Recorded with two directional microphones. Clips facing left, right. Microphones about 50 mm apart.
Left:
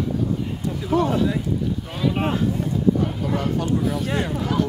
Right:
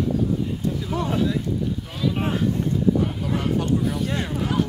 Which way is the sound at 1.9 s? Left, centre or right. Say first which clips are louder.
Left 2 dB; left.